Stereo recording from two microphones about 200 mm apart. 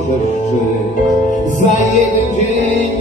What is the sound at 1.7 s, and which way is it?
Music, 35° left (ahead or behind).